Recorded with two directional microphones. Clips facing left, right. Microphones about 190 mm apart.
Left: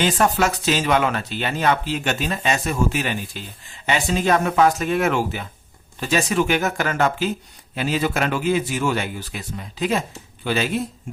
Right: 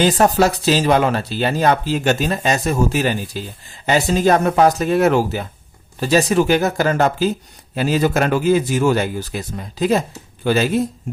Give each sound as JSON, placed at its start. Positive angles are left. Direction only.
{"t": 0.0, "sound": "speech", "side_deg": -35}